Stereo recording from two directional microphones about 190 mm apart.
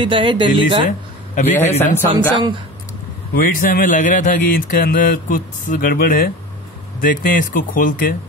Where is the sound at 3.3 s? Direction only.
50° left (ahead or behind).